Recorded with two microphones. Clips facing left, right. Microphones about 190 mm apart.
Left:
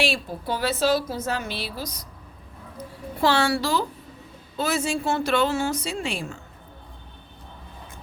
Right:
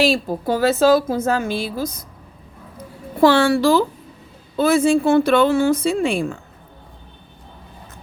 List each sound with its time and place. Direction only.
0.0 s a woman's voice: 40° right (ahead or behind)
3.2 s a woman's voice: 50° right (ahead or behind)